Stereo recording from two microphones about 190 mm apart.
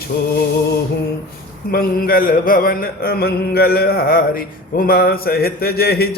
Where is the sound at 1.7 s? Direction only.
50° left (ahead or behind).